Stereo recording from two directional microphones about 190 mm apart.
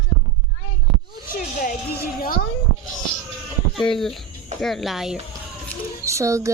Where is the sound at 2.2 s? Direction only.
50° left (ahead or behind).